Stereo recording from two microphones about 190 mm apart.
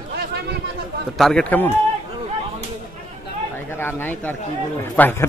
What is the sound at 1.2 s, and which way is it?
Speech, 5° left (ahead or behind).